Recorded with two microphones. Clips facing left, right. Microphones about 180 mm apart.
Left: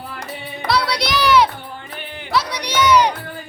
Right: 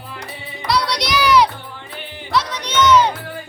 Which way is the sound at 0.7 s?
5° left (ahead or behind).